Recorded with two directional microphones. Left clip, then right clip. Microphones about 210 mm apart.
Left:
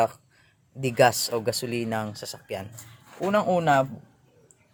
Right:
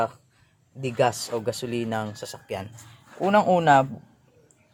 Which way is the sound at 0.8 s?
15° left (ahead or behind).